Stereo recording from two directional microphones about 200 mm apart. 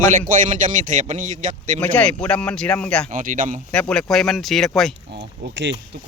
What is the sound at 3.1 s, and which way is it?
Speech, 40° right (ahead or behind).